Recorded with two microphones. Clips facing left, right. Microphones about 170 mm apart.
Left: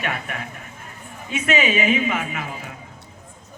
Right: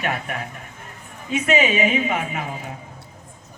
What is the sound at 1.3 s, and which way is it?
A man's voice, 35° right (ahead or behind).